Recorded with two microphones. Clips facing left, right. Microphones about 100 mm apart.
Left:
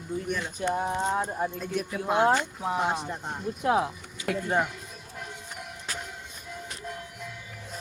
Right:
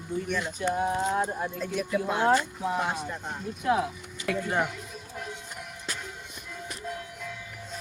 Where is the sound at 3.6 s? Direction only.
40° left (ahead or behind).